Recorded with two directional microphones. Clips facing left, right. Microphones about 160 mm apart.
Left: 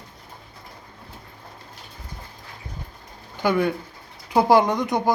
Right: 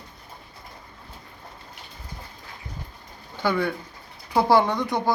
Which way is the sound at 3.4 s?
20° left (ahead or behind).